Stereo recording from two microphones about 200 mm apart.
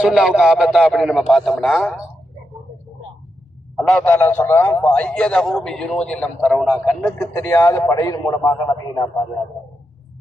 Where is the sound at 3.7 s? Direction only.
5° left (ahead or behind).